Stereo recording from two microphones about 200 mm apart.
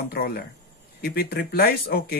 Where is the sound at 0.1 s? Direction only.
50° left (ahead or behind).